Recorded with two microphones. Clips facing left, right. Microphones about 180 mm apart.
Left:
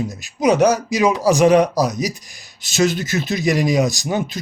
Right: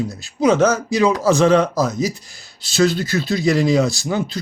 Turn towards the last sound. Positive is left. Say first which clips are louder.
# even
turn(degrees=20)  # may be behind; listen again after turning